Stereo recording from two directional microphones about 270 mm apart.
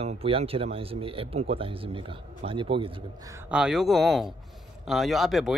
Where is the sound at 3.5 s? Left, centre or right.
Centre.